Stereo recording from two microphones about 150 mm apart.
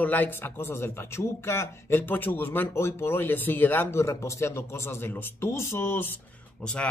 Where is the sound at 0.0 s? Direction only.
10° left (ahead or behind).